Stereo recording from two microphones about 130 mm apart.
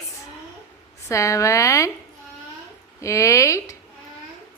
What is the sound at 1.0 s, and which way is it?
Speech, 25° left (ahead or behind).